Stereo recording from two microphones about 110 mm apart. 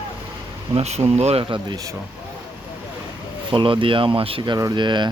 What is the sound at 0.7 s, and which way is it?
Speech, 75° right (ahead or behind).